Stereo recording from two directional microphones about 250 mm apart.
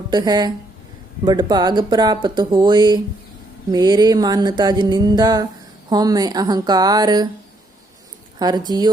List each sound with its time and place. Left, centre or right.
0.1 s speech: centre
8.4 s speech: centre